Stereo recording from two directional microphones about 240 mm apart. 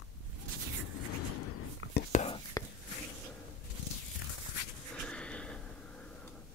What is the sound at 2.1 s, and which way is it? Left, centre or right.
Whispering, left.